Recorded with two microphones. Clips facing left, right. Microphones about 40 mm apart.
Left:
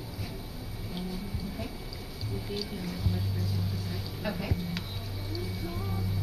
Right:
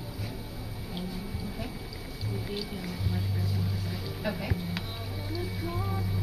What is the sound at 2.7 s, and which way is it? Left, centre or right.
Speech, centre.